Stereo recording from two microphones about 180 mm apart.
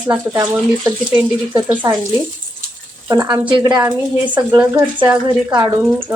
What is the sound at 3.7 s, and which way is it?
Speech, 20° right (ahead or behind).